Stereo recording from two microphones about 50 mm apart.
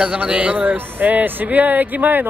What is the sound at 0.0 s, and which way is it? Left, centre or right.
Speech, right.